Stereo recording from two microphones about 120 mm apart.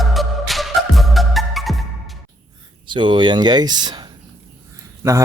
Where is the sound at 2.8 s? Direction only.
40° right (ahead or behind).